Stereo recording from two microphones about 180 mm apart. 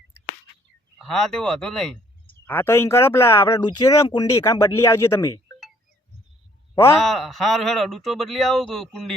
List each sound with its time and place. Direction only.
0.9 s speech: centre (ahead or behind)
7.0 s speech: centre (ahead or behind)